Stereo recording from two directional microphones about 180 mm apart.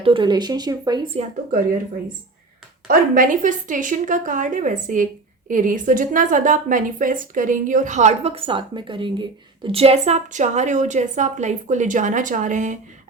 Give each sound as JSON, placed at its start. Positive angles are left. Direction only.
{"t": 0.0, "sound": "speech", "side_deg": -25}
{"t": 2.8, "sound": "a woman's voice", "side_deg": -50}